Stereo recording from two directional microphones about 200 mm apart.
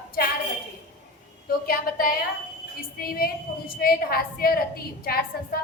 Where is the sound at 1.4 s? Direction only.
45° left (ahead or behind).